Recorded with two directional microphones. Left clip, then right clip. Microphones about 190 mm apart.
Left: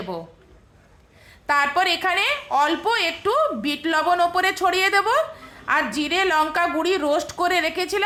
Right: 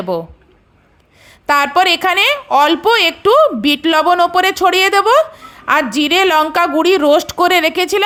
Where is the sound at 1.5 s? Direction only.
35° right (ahead or behind).